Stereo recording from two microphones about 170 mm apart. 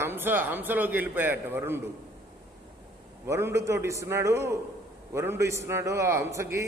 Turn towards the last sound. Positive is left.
turn(degrees=-15)  # may be behind; listen again after turning